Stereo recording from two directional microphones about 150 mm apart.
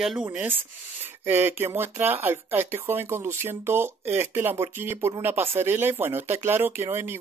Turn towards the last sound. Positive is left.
turn(degrees=-15)  # may be behind; listen again after turning